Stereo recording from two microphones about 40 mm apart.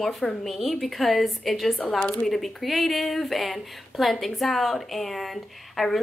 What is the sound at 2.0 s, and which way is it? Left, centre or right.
Speech, left.